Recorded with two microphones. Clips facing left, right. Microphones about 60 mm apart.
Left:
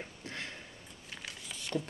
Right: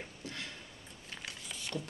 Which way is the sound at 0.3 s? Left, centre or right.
Left.